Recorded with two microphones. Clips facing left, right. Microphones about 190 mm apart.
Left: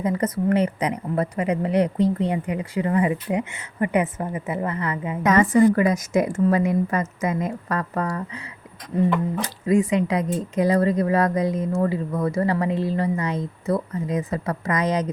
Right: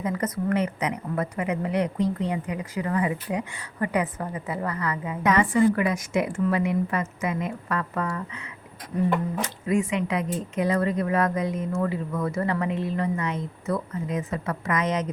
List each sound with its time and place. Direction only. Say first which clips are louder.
0.0 s a woman's voice: left 4 dB; 30° left (ahead or behind)
5.2 s a woman's voice: left 4 dB; 45° left (ahead or behind)
9.4 s speech: left 4 dB; 35° left (ahead or behind)